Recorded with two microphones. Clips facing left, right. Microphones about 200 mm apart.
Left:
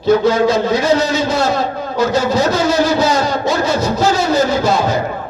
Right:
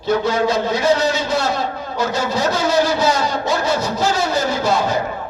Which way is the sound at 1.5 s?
90° left.